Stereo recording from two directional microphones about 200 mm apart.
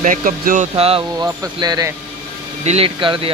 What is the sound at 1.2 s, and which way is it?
Speech, 20° right (ahead or behind).